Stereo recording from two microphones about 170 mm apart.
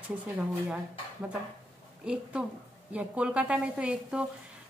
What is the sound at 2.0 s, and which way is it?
A woman's voice, 5° right (ahead or behind).